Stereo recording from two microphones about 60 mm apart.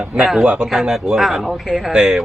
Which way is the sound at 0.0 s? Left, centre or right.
Centre.